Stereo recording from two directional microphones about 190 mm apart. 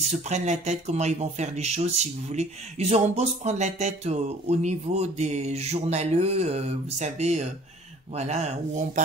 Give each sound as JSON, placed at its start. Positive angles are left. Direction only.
{"t": 0.1, "sound": "speech", "side_deg": -35}